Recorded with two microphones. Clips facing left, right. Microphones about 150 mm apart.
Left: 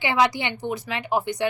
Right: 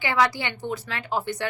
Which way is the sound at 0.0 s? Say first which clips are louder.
Left 2 dB; 20° left (ahead or behind).